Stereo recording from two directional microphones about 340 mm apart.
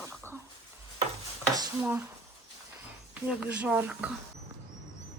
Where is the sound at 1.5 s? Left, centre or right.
Centre.